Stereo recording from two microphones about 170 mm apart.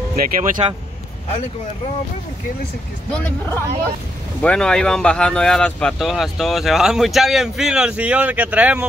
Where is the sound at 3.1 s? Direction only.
10° left (ahead or behind).